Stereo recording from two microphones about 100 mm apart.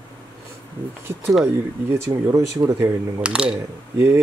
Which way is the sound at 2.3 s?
30° right (ahead or behind).